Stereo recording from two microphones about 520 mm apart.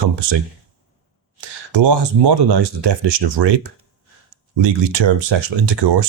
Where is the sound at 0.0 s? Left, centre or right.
Right.